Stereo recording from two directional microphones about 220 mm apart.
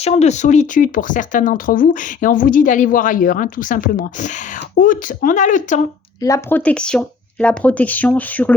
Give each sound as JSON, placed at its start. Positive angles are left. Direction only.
{"t": 0.0, "sound": "speech", "side_deg": 30}
{"t": 6.2, "sound": "speech", "side_deg": 10}